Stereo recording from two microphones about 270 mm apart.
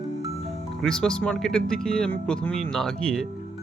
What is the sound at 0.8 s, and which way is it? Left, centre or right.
Speech, centre.